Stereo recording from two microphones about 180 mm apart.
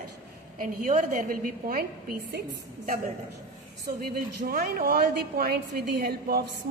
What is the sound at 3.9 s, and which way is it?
A woman's voice, 55° right (ahead or behind).